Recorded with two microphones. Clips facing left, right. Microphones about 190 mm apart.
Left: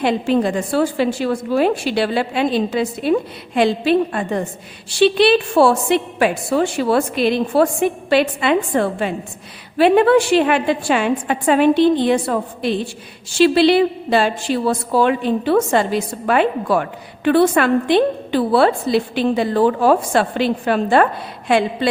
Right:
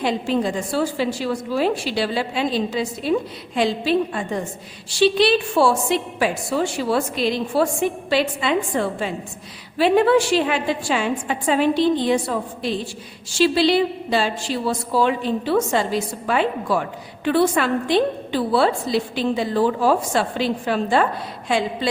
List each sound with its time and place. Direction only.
0.0 s a woman's voice: 60° left (ahead or behind)